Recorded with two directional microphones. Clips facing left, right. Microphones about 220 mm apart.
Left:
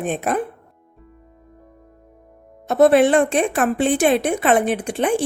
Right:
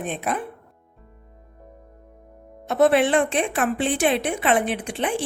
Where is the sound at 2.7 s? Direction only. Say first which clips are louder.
Left 4 dB; 40° left (ahead or behind).